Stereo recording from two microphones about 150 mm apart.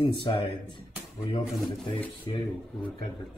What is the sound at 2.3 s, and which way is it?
Speech, 30° left (ahead or behind).